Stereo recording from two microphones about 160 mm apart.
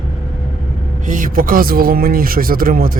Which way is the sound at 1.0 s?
60° right (ahead or behind).